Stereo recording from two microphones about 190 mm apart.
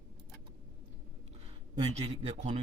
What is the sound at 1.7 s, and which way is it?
Speech, 35° right (ahead or behind).